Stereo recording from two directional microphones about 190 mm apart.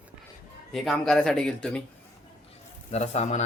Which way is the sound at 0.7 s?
Centre (ahead or behind).